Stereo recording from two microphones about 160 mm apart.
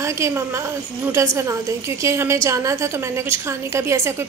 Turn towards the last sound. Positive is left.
turn(degrees=-15)  # may be behind; listen again after turning